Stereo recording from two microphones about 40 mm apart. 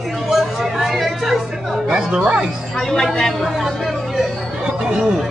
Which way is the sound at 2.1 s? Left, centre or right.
Right.